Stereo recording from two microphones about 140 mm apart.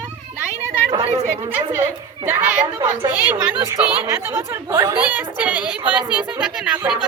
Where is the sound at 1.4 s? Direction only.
15° right (ahead or behind).